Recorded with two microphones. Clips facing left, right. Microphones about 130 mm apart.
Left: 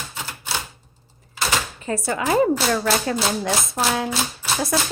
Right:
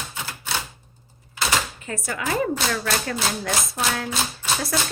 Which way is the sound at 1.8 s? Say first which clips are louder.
Left 5 dB; 30° left (ahead or behind).